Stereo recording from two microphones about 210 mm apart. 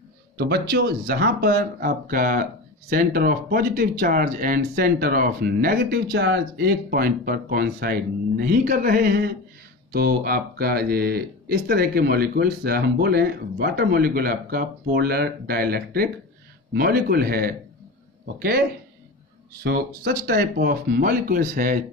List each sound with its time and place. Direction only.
0.4 s speech: 50° right (ahead or behind)
6.1 s speech: 55° right (ahead or behind)